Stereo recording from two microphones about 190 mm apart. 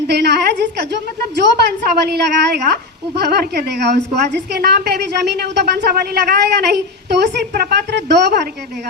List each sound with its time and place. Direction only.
0.1 s a woman's voice: 60° right (ahead or behind)